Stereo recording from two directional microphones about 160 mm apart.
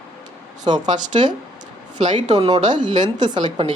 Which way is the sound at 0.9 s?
50° right (ahead or behind).